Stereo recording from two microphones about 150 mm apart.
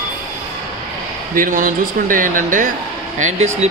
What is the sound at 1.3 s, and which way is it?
Speech, 65° right (ahead or behind).